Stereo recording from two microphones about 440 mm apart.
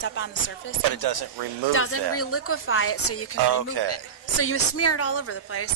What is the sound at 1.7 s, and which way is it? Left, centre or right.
Speech, left.